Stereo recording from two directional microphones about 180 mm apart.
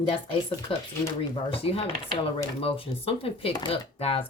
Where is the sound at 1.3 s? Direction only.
30° left (ahead or behind).